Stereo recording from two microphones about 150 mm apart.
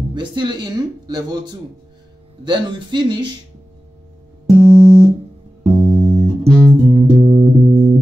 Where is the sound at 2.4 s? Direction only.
30° right (ahead or behind).